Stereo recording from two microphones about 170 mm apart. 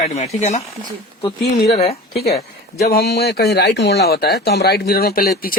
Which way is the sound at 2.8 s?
70° left (ahead or behind).